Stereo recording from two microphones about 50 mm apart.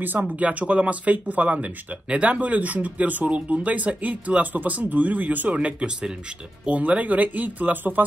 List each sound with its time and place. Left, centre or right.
0.4 s speech: right